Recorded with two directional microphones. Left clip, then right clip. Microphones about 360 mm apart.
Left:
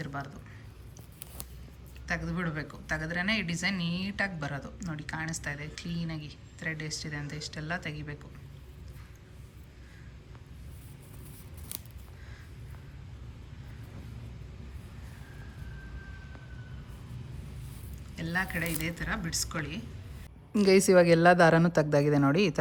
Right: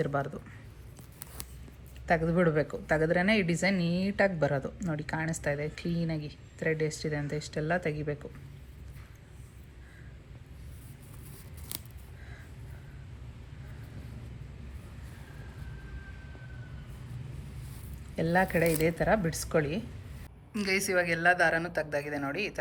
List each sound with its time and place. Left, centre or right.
0.0 s a woman's voice: centre
2.0 s a woman's voice: centre
18.2 s a woman's voice: centre
20.5 s a woman's voice: centre